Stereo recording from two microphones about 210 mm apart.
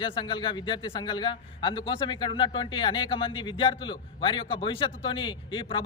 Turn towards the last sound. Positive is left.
turn(degrees=25)  # may be behind; listen again after turning